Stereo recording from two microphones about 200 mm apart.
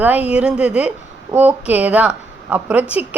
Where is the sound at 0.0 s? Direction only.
5° right (ahead or behind).